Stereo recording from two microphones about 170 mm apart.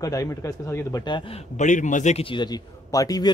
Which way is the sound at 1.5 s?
45° left (ahead or behind).